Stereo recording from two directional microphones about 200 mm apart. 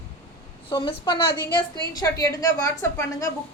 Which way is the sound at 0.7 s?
25° left (ahead or behind).